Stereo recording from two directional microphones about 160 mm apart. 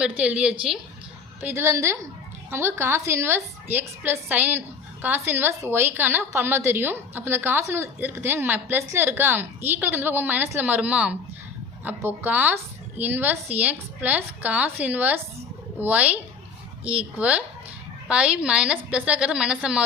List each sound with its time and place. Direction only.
0.0 s a woman's voice: 10° right (ahead or behind)